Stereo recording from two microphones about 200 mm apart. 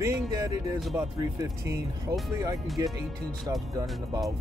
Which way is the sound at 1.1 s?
20° right (ahead or behind).